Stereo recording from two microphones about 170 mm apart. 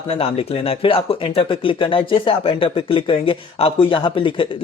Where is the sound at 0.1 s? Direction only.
35° left (ahead or behind).